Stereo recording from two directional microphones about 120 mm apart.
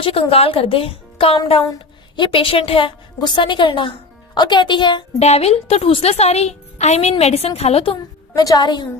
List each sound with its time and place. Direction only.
0.0 s a woman's voice: 50° left (ahead or behind)
5.2 s a woman's voice: 60° left (ahead or behind)
8.4 s speech: 35° left (ahead or behind)